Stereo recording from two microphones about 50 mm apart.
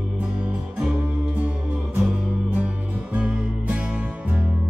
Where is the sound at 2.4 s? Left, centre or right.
Right.